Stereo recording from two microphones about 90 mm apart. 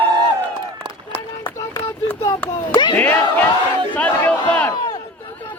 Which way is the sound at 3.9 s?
15° left (ahead or behind).